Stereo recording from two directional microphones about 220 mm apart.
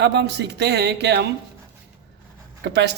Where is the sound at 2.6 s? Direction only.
50° right (ahead or behind).